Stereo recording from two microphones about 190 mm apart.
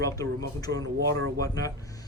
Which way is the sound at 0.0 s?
20° left (ahead or behind).